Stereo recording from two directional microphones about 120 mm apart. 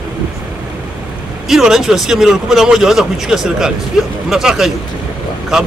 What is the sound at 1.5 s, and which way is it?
Speech, 5° right (ahead or behind).